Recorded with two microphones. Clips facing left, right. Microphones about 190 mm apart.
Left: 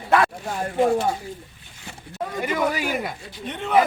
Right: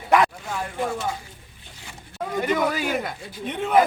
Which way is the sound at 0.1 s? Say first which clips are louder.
Right 1 dB; 15° right (ahead or behind).